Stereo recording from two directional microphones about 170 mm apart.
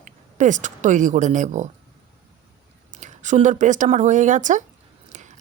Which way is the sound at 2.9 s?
45° right (ahead or behind).